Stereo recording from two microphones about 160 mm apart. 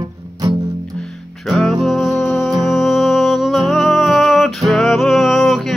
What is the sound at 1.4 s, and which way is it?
Music, centre (ahead or behind).